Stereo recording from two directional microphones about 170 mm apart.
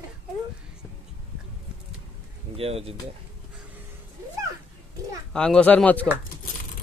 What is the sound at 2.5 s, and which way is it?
Speech, 35° right (ahead or behind).